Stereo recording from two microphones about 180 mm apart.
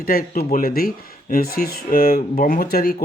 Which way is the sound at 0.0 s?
55° left (ahead or behind).